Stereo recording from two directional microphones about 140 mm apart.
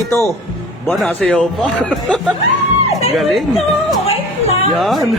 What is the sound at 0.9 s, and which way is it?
Speech, 5° left (ahead or behind).